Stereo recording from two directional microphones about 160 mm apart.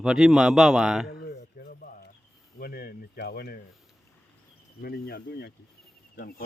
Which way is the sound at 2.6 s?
75° left (ahead or behind).